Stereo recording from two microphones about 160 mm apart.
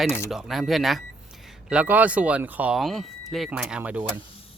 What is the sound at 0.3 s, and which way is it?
Speech, centre (ahead or behind).